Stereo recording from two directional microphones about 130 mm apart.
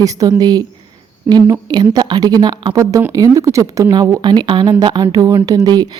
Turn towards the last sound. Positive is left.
turn(degrees=-30)  # may be behind; listen again after turning